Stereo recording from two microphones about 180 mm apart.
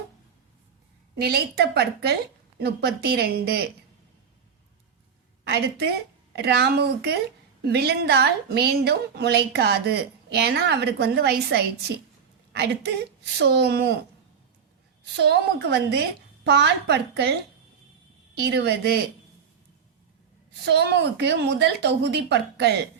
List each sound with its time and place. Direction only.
1.2 s a woman's voice: 60° right (ahead or behind)
5.5 s a woman's voice: 65° right (ahead or behind)
15.2 s a woman's voice: 70° right (ahead or behind)
18.3 s a woman's voice: 65° right (ahead or behind)
20.7 s a woman's voice: 65° right (ahead or behind)